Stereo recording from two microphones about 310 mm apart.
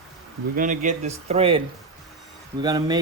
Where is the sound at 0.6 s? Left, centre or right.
Right.